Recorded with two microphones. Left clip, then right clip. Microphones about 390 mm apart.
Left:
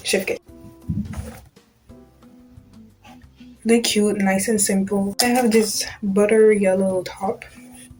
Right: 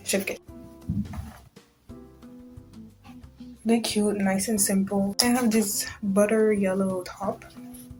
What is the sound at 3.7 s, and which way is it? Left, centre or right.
Speech, right.